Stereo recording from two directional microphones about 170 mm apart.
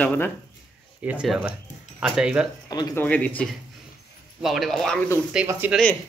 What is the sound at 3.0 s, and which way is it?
Speech, 10° left (ahead or behind).